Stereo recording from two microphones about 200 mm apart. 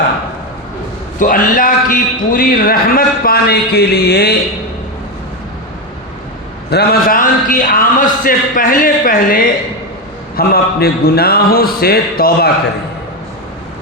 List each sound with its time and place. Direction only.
1.2 s a man's voice: 45° left (ahead or behind)
6.7 s a man's voice: 50° left (ahead or behind)